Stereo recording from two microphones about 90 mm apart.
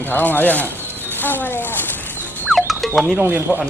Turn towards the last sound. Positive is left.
turn(degrees=-20)  # may be behind; listen again after turning